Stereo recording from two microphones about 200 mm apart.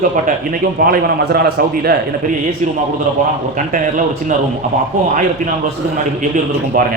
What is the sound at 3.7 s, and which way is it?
Speech, 40° right (ahead or behind).